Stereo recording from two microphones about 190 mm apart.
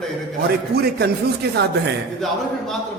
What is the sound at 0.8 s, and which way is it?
Speech, 60° right (ahead or behind).